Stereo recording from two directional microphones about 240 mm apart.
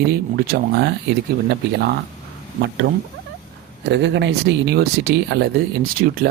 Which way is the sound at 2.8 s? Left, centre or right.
Right.